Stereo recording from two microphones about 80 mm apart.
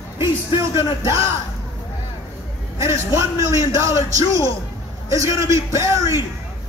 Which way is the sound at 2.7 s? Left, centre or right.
Right.